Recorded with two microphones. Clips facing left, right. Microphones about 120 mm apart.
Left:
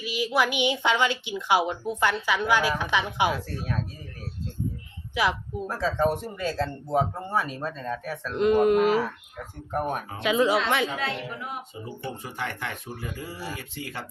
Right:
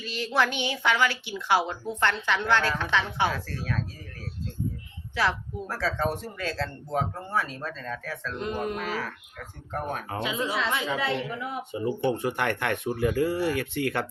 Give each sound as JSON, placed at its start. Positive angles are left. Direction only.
{"t": 0.0, "sound": "a woman's voice", "side_deg": 10}
{"t": 5.1, "sound": "a woman's voice", "side_deg": 15}
{"t": 8.4, "sound": "speech", "side_deg": 90}
{"t": 8.9, "sound": "a woman's voice", "side_deg": 15}
{"t": 10.2, "sound": "a woman's voice", "side_deg": 70}
{"t": 11.7, "sound": "speech", "side_deg": -65}